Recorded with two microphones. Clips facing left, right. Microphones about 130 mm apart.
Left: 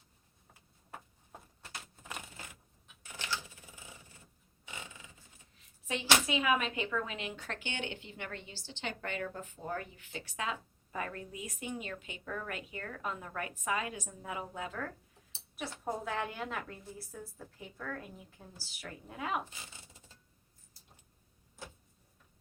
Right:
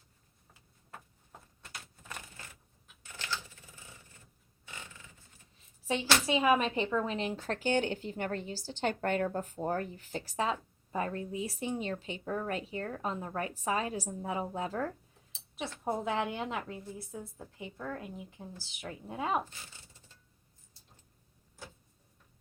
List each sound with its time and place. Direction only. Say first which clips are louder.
3.0 s typewriter: left 1 dB; 15° left (ahead or behind)
4.6 s a sound: left 1 dB; 15° left (ahead or behind)
5.9 s speech: right 2 dB; 30° right (ahead or behind)
15.8 s a woman's voice: right 4 dB; 20° right (ahead or behind)